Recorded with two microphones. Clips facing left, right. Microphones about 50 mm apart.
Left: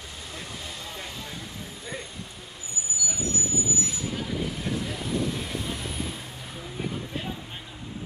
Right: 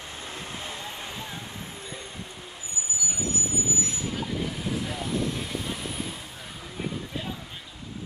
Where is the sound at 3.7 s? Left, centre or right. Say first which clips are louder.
Even; centre.